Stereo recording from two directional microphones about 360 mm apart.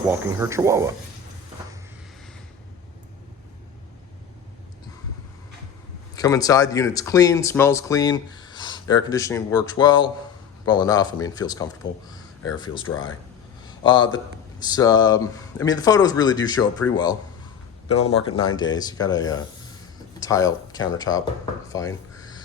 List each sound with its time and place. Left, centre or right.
0.0 s speech: centre
6.1 s speech: centre